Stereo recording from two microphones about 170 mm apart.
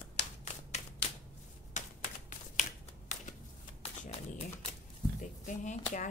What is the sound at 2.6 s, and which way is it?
Finger snapping, 45° left (ahead or behind).